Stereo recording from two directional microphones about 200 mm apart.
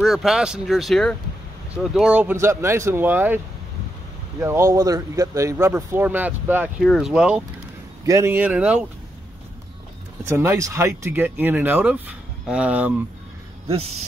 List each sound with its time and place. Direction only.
0.0 s speech: centre (ahead or behind)
4.4 s speech: 15° right (ahead or behind)
10.2 s speech: 10° right (ahead or behind)
13.7 s speech: 30° right (ahead or behind)